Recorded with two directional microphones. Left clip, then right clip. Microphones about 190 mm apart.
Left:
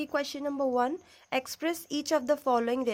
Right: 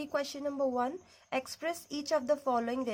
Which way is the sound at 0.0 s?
35° left (ahead or behind).